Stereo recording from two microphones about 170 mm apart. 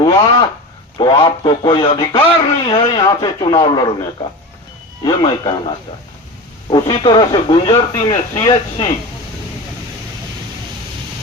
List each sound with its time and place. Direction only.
0.0 s a sound: 25° left (ahead or behind)
0.9 s speech: 25° left (ahead or behind)
5.0 s speech: 25° left (ahead or behind)